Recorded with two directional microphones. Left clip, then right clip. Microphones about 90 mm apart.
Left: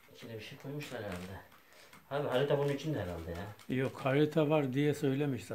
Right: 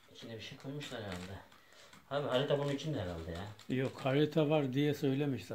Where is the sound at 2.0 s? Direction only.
35° left (ahead or behind).